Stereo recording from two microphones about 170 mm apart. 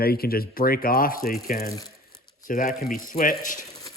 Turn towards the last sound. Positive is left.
turn(degrees=55)  # may be behind; listen again after turning